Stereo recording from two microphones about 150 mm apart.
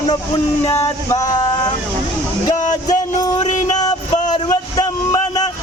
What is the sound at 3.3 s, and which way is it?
Music, 55° left (ahead or behind).